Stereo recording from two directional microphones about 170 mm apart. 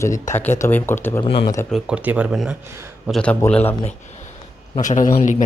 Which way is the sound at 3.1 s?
5° left (ahead or behind).